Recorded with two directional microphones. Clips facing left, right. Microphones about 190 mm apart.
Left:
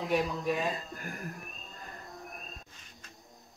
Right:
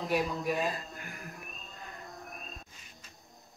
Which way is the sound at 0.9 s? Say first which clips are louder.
Left 4 dB; 45° left (ahead or behind).